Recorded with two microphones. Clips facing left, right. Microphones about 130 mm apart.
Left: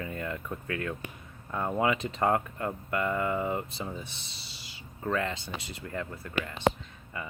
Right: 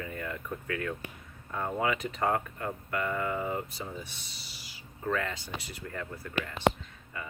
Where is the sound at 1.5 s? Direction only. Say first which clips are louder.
Left 3 dB; 20° left (ahead or behind).